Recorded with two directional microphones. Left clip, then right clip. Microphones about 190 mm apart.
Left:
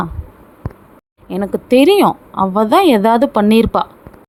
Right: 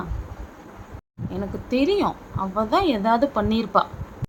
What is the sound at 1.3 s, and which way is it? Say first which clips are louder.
A woman's voice: left 13 dB; 50° left (ahead or behind).